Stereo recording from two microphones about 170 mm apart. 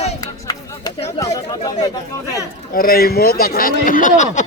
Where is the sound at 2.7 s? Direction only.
60° left (ahead or behind).